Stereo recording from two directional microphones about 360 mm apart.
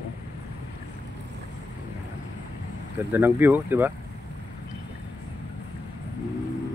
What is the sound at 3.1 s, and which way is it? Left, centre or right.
Speech, centre.